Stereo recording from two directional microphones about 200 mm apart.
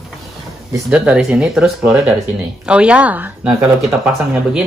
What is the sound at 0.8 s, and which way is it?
Speech, 5° right (ahead or behind).